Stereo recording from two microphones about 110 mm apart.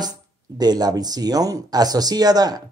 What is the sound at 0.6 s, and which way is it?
Speech, 35° right (ahead or behind).